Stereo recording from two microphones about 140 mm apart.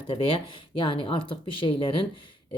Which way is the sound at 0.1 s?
35° left (ahead or behind).